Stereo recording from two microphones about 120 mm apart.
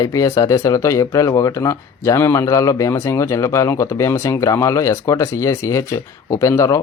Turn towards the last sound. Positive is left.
turn(degrees=25)  # may be behind; listen again after turning